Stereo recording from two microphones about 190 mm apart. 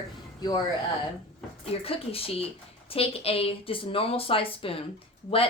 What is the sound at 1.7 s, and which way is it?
A woman's voice, 30° left (ahead or behind).